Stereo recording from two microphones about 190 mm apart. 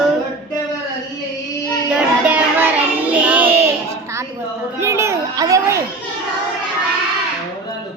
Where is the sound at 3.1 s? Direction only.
10° right (ahead or behind).